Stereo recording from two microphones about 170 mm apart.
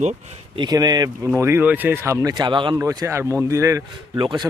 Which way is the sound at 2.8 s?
15° right (ahead or behind).